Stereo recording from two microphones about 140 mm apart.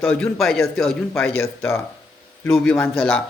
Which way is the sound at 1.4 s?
20° left (ahead or behind).